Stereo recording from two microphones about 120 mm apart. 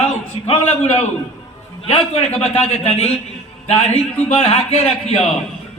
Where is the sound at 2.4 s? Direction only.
60° left (ahead or behind).